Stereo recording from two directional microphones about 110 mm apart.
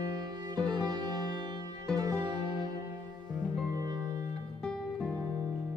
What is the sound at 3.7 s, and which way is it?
Music, 35° right (ahead or behind).